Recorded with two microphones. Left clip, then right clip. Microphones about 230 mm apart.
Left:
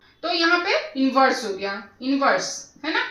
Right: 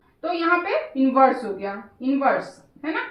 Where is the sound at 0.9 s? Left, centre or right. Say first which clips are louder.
Right 3 dB; centre.